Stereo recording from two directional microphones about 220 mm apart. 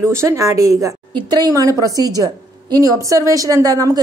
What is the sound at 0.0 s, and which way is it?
A woman's voice, 10° right (ahead or behind).